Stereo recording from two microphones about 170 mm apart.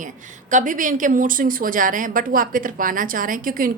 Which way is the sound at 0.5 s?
50° right (ahead or behind).